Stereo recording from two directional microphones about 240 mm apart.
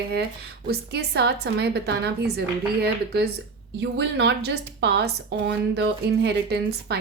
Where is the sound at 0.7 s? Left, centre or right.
Right.